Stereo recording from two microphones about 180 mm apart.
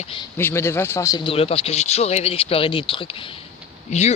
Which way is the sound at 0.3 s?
15° left (ahead or behind).